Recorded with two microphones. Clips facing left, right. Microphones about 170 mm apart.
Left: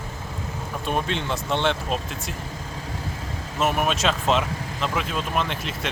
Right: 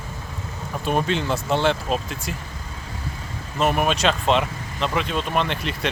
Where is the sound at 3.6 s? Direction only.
Centre (ahead or behind).